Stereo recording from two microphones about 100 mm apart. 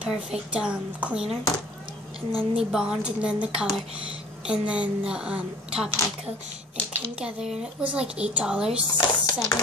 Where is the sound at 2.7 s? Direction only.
10° right (ahead or behind).